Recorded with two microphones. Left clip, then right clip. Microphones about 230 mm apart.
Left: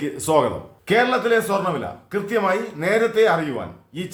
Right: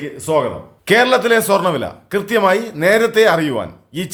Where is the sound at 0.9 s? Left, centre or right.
Right.